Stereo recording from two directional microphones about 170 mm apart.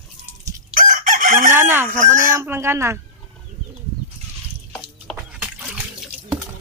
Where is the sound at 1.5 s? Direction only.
10° right (ahead or behind).